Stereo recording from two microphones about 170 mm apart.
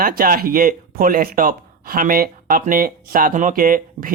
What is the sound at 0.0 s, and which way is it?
Speech, 55° right (ahead or behind).